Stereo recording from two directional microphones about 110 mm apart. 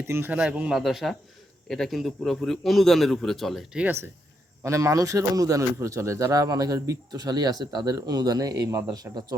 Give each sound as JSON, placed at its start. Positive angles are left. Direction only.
{"t": 0.1, "sound": "a man's voice", "side_deg": -15}
{"t": 4.6, "sound": "a man's voice", "side_deg": -30}